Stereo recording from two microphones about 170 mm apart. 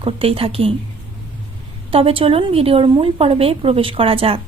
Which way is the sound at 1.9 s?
30° right (ahead or behind).